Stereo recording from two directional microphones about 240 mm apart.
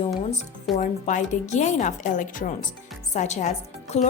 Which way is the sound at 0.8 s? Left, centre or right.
Left.